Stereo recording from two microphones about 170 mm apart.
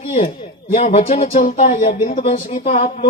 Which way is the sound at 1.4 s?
55° left (ahead or behind).